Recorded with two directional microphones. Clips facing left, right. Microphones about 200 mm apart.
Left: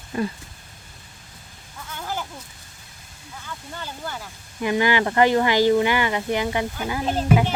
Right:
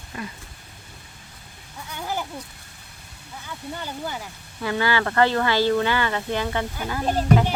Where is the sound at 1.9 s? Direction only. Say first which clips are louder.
Right 1 dB; 15° right (ahead or behind).